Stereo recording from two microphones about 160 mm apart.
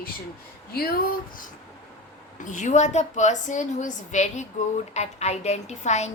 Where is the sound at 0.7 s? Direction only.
70° left (ahead or behind).